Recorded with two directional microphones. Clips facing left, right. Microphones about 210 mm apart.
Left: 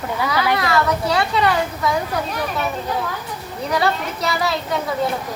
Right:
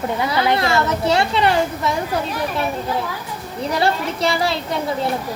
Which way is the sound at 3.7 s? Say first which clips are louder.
Right 1 dB; 30° right (ahead or behind).